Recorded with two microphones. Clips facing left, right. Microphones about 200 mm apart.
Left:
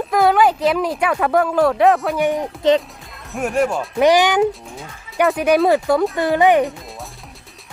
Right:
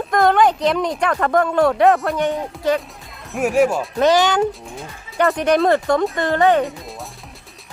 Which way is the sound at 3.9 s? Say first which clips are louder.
Left 3 dB; 15° left (ahead or behind).